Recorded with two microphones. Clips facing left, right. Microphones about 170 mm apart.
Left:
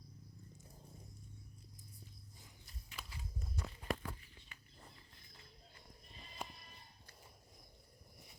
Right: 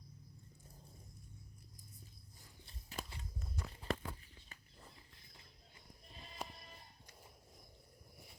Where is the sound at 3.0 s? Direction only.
45° right (ahead or behind).